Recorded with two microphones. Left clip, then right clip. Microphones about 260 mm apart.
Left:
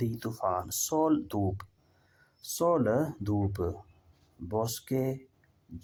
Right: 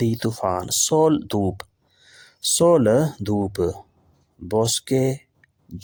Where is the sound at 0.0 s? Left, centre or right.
Right.